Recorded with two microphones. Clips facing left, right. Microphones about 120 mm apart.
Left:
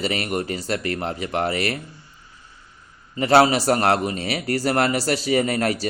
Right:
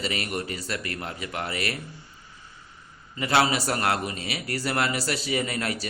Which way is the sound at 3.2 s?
40° left (ahead or behind).